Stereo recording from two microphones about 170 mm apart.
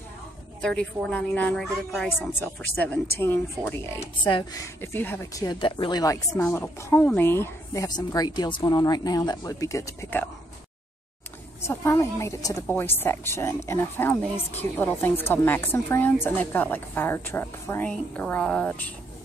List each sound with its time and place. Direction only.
0.6 s a woman's voice: 5° left (ahead or behind)
2.0 s a woman's voice: 10° left (ahead or behind)
4.2 s a woman's voice: 25° left (ahead or behind)
4.8 s a woman's voice: 10° left (ahead or behind)
6.3 s a woman's voice: 10° left (ahead or behind)
11.6 s a woman's voice: 15° left (ahead or behind)